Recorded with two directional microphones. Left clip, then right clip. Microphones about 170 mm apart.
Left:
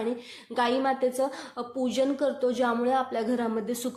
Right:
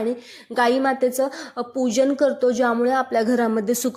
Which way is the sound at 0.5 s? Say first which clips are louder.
Right 6 dB; 40° right (ahead or behind).